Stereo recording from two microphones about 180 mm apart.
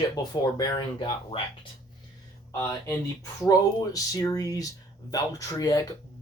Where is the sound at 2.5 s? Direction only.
20° left (ahead or behind).